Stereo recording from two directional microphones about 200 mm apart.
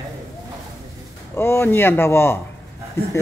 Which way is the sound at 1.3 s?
10° left (ahead or behind).